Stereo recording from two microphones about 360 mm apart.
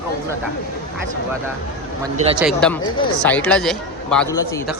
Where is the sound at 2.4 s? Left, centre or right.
Centre.